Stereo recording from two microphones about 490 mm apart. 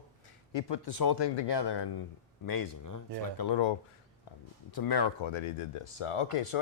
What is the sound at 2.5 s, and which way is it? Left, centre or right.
Speech, left.